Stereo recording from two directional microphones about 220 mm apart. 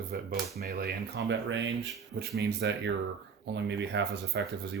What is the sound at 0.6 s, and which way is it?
Speech, 50° right (ahead or behind).